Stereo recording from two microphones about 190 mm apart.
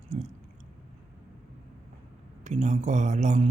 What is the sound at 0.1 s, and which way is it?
Chewing, 35° right (ahead or behind).